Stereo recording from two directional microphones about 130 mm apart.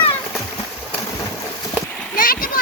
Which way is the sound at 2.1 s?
90° left.